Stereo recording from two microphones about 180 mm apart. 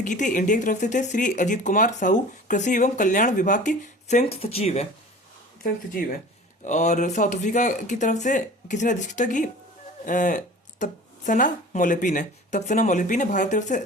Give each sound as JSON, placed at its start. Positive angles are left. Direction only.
{"t": 0.0, "sound": "speech", "side_deg": 45}
{"t": 6.7, "sound": "speech", "side_deg": 40}